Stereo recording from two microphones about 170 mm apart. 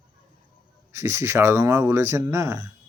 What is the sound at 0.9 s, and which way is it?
Speech, 15° right (ahead or behind).